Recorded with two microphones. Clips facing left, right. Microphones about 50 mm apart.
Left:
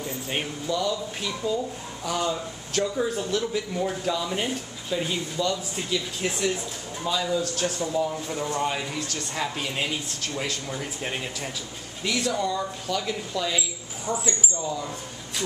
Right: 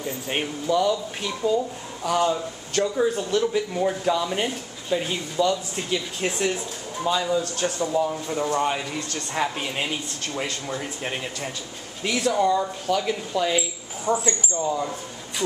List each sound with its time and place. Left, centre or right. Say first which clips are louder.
0.0 s speech: right 2 dB; centre
12.3 s speech: right 9 dB; centre
14.6 s speech: right 5 dB; right